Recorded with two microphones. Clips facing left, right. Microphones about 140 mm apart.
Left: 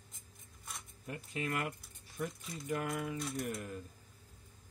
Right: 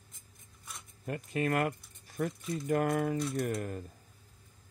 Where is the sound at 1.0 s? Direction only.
55° right (ahead or behind).